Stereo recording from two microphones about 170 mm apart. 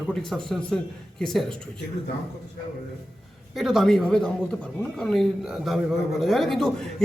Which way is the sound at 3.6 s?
Centre (ahead or behind).